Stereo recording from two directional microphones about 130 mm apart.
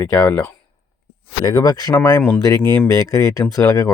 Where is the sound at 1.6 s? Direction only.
30° left (ahead or behind).